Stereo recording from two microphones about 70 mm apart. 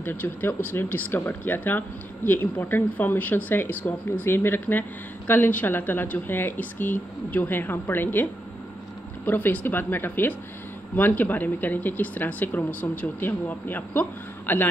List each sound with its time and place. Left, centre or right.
0.0 s speech: left